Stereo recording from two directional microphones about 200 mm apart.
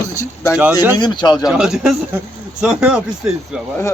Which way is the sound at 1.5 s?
5° right (ahead or behind).